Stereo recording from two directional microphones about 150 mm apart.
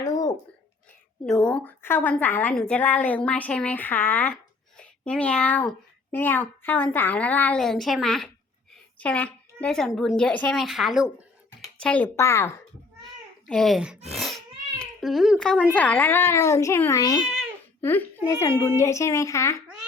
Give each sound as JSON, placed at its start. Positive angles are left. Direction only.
{"t": 0.0, "sound": "a sound", "side_deg": 25}
{"t": 1.2, "sound": "a child's voice", "side_deg": 5}
{"t": 11.8, "sound": "a child's voice", "side_deg": 10}
{"t": 13.5, "sound": "a child's voice", "side_deg": 0}